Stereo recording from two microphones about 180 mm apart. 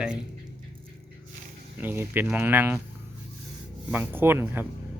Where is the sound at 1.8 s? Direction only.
10° right (ahead or behind).